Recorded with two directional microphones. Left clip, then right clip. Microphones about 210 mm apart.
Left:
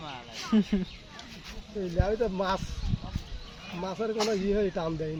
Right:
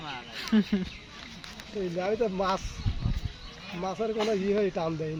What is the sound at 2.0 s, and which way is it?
Speech, 10° right (ahead or behind).